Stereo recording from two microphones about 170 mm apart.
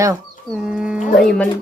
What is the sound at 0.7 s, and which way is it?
Speech, 5° right (ahead or behind).